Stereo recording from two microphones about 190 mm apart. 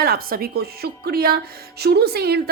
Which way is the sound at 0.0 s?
50° right (ahead or behind).